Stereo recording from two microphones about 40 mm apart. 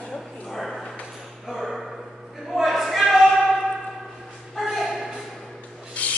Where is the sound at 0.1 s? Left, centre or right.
Centre.